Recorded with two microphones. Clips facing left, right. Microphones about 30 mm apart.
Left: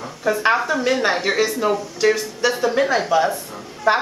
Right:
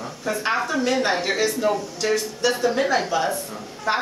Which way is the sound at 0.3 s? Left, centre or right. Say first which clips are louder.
Left 5 dB; centre.